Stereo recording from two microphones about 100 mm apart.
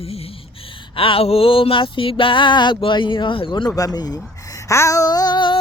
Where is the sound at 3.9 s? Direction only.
40° left (ahead or behind).